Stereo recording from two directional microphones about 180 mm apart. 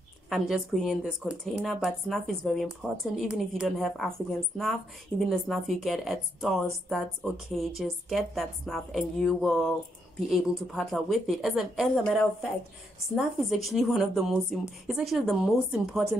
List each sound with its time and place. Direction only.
0.3 s a woman's voice: centre (ahead or behind)